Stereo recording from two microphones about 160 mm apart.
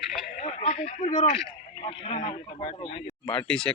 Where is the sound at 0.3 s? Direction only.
45° left (ahead or behind).